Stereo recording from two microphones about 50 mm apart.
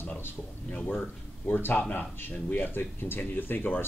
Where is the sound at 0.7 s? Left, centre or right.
Left.